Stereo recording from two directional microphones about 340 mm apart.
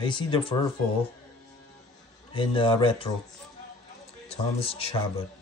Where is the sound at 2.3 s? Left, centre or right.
Centre.